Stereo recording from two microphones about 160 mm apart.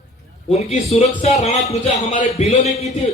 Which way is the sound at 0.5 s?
40° left (ahead or behind).